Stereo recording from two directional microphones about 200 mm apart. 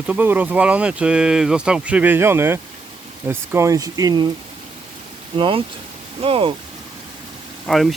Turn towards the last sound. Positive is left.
turn(degrees=0)  # may be behind; listen again after turning